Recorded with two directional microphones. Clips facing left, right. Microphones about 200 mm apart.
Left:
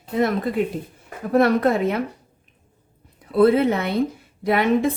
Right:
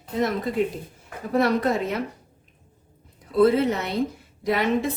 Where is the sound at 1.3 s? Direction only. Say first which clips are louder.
Left 4 dB; 55° left (ahead or behind).